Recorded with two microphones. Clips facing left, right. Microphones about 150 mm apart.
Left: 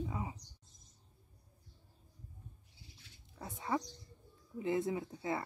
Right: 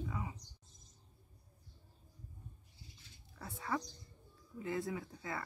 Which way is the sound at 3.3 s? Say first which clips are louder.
Left 3 dB; 20° left (ahead or behind).